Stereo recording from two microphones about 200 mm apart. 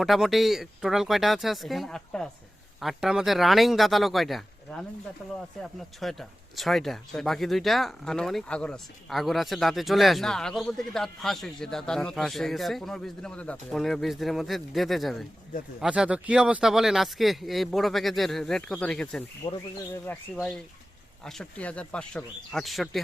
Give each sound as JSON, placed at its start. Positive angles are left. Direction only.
{"t": 0.0, "sound": "speech", "side_deg": 0}
{"t": 19.4, "sound": "speech", "side_deg": 25}
{"t": 20.1, "sound": "speech", "side_deg": 5}